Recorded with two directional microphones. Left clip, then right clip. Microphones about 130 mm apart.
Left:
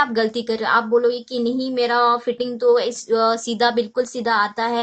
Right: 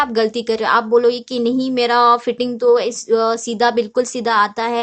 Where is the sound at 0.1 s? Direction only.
35° right (ahead or behind).